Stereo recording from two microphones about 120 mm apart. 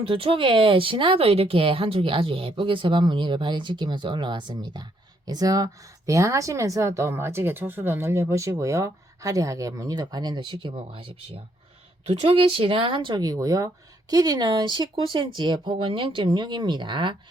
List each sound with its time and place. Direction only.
0.0 s speech: 50° right (ahead or behind)